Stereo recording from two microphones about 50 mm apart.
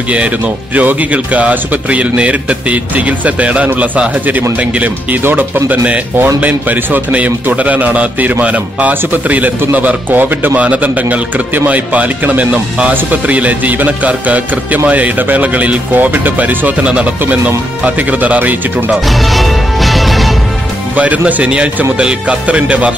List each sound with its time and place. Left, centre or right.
0.7 s a man's voice: right
16.8 s a man's voice: right
18.9 s music: centre
20.9 s a man's voice: right